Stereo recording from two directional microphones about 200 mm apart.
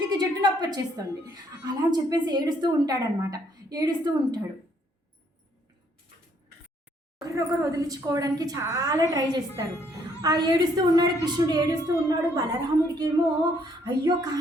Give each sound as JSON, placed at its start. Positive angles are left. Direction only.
{"t": 0.1, "sound": "a woman's voice", "side_deg": -20}
{"t": 7.2, "sound": "a woman's voice", "side_deg": -15}